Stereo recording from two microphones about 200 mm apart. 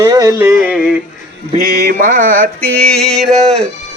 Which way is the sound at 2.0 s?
40° right (ahead or behind).